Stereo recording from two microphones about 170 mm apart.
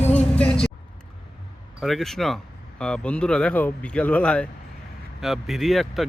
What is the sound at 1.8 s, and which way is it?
Speech, centre (ahead or behind).